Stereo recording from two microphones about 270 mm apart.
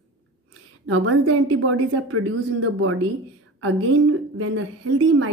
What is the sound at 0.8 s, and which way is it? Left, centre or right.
A woman's voice, right.